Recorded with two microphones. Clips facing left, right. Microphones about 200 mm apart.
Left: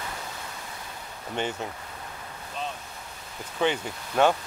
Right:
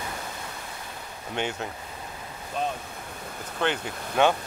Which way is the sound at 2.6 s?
50° right (ahead or behind).